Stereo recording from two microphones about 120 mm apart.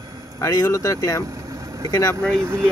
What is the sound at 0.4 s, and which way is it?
A man's voice, 30° left (ahead or behind).